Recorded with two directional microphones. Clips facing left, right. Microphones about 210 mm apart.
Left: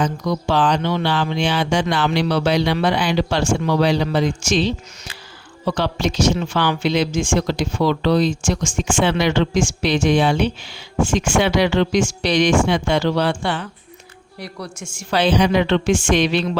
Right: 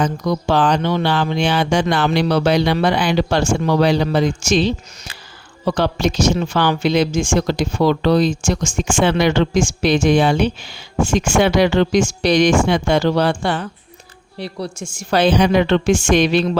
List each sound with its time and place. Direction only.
0.0 s speech: 45° right (ahead or behind)
14.3 s speech: 30° right (ahead or behind)
15.1 s speech: 45° right (ahead or behind)